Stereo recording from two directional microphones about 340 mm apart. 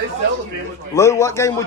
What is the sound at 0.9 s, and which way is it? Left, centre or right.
Speech, centre.